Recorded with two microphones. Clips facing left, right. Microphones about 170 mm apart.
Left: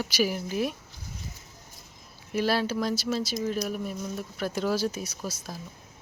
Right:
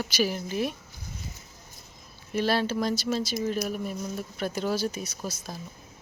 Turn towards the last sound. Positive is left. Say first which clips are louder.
# even
turn(degrees=5)  # may be behind; listen again after turning